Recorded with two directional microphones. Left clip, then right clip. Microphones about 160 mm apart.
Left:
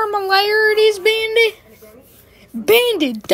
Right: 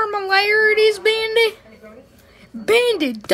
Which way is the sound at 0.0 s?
5° left (ahead or behind).